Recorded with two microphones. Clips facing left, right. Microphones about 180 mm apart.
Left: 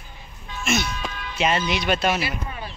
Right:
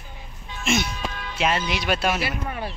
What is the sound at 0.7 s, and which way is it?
Speech, 15° right (ahead or behind).